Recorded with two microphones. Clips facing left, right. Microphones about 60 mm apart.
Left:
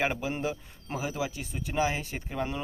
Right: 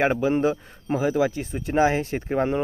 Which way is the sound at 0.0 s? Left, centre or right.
Right.